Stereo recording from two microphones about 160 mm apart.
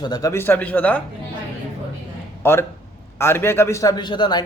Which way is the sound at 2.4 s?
15° left (ahead or behind).